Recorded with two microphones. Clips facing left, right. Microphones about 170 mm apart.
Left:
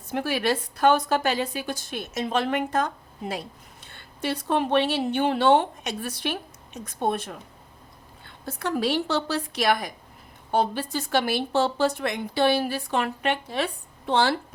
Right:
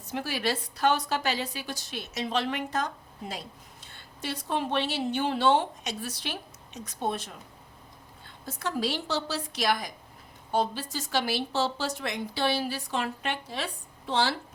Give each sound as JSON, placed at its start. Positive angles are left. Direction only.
{"t": 0.1, "sound": "a woman's voice", "side_deg": 55}
{"t": 8.4, "sound": "a woman's voice", "side_deg": 60}